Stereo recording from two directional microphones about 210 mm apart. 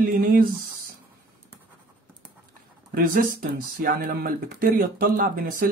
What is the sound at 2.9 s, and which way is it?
Speech, 45° right (ahead or behind).